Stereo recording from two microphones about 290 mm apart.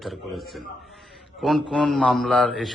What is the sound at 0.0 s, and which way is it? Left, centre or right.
A man's voice, centre.